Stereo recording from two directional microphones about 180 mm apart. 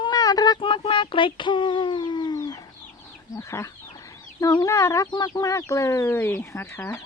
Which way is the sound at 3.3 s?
15° left (ahead or behind).